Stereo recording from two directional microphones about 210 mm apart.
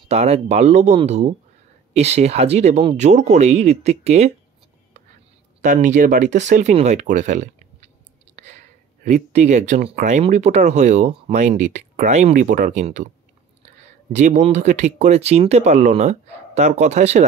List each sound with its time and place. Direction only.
0.1 s speech: 30° right (ahead or behind)
5.6 s speech: 35° right (ahead or behind)
14.1 s speech: 35° right (ahead or behind)